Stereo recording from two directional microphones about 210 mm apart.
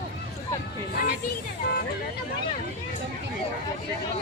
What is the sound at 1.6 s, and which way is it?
Speech, 55° left (ahead or behind).